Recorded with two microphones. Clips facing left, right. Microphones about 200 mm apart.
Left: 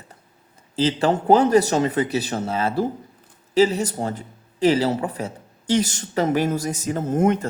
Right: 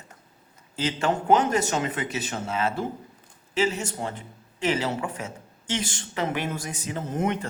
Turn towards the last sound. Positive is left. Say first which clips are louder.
# left 7 dB
turn(degrees=45)  # may be behind; listen again after turning